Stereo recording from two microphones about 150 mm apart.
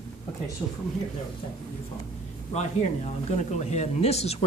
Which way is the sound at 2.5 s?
45° left (ahead or behind).